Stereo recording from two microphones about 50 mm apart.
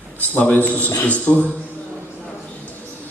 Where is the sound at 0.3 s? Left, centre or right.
Left.